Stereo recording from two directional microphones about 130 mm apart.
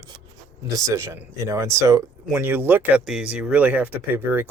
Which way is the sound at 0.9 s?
20° right (ahead or behind).